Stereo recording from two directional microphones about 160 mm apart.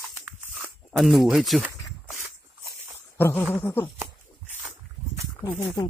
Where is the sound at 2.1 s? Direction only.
15° right (ahead or behind).